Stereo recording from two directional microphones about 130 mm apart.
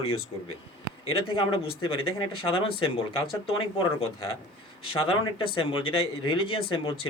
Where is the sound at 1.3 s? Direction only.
45° left (ahead or behind).